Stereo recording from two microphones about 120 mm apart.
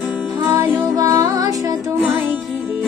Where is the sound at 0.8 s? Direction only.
30° right (ahead or behind).